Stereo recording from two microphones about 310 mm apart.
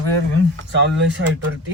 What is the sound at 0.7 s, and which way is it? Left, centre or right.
Speech, right.